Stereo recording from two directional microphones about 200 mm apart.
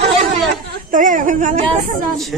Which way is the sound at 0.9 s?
40° right (ahead or behind).